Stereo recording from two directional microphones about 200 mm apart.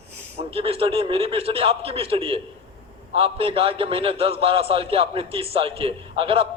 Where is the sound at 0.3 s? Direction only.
30° right (ahead or behind).